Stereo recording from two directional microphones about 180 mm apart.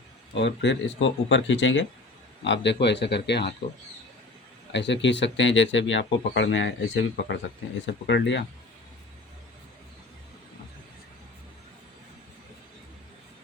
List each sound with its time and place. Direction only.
0.3 s speech: 85° left
2.4 s speech: 75° left (ahead or behind)
4.7 s speech: 80° left
8.0 s speech: 80° left